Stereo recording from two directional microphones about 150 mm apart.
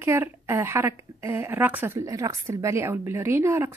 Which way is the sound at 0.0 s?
15° right (ahead or behind).